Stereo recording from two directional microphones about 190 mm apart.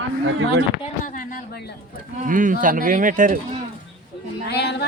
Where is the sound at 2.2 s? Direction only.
45° right (ahead or behind).